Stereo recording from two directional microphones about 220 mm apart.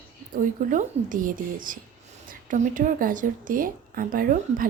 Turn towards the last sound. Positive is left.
turn(degrees=-40)  # may be behind; listen again after turning